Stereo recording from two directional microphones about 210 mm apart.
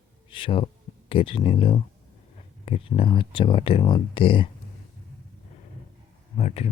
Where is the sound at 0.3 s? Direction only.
25° left (ahead or behind).